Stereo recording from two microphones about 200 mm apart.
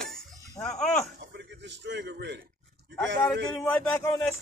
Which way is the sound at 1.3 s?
60° right (ahead or behind).